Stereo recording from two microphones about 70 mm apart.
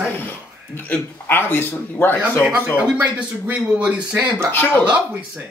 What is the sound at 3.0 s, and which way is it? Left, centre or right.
Speech, centre.